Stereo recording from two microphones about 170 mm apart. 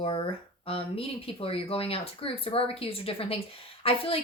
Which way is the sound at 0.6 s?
35° left (ahead or behind).